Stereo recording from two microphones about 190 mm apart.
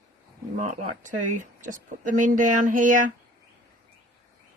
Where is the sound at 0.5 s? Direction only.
45° right (ahead or behind).